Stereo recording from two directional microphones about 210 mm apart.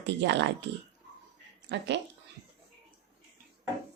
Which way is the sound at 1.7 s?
55° right (ahead or behind).